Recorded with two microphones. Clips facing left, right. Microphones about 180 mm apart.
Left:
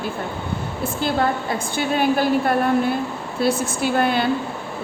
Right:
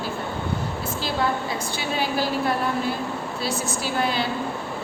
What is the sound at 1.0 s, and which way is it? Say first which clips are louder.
A woman's voice: left 4 dB; 50° left (ahead or behind).